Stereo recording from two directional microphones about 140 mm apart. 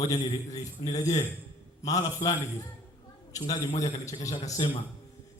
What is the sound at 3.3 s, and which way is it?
A man's voice, 25° left (ahead or behind).